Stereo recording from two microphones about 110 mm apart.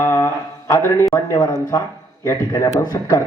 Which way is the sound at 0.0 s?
25° left (ahead or behind).